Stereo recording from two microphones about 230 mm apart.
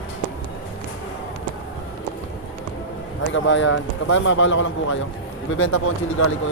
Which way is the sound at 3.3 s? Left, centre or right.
Left.